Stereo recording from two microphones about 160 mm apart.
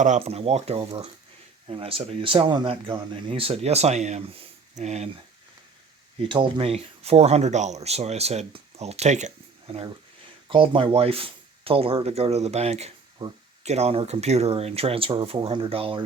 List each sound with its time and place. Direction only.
0.0 s speech: 45° right (ahead or behind)
6.2 s speech: 35° right (ahead or behind)
13.2 s speech: 20° right (ahead or behind)
13.7 s speech: 40° right (ahead or behind)